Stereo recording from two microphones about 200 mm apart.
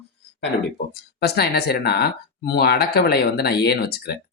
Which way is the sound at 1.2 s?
55° left (ahead or behind).